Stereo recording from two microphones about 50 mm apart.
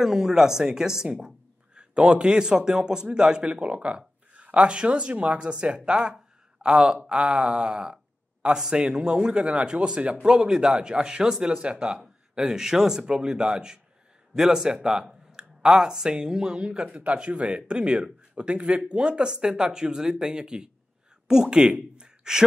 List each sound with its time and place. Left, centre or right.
0.0 s speech: centre
14.3 s a sound: centre
15.7 s speech: centre